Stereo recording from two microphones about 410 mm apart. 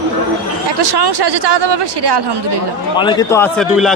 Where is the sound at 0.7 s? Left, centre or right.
Right.